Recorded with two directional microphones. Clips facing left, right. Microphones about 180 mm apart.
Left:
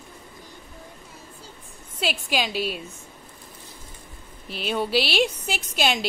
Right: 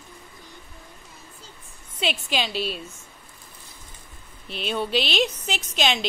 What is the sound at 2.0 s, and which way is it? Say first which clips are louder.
Speech: left 1 dB; 5° left (ahead or behind).